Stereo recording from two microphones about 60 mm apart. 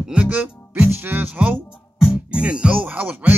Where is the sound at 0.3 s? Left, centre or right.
Right.